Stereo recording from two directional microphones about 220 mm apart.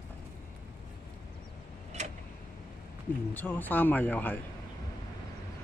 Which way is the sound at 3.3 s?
10° left (ahead or behind).